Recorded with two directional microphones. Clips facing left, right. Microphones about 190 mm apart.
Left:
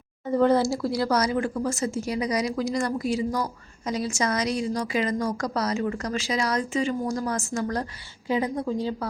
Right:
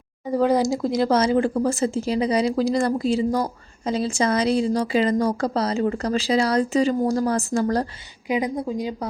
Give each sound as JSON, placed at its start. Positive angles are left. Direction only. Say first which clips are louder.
{"t": 0.3, "sound": "speech", "louder": "right 1 dB", "side_deg": -10}
{"t": 8.3, "sound": "a woman's voice", "louder": "right 2 dB", "side_deg": -15}